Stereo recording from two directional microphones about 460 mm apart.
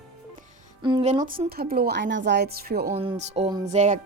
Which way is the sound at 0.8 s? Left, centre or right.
Centre.